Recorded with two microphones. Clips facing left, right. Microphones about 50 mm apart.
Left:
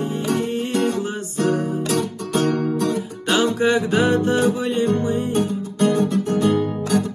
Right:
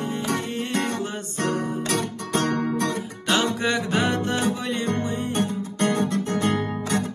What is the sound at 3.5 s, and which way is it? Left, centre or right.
Music, left.